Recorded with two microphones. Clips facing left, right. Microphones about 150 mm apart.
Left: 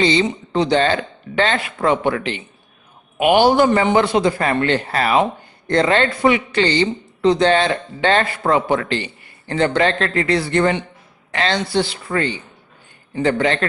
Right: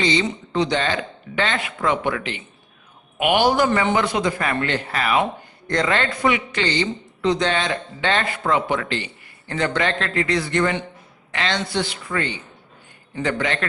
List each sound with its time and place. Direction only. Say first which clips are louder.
0.0 s a woman's voice: left 4 dB; 35° left (ahead or behind)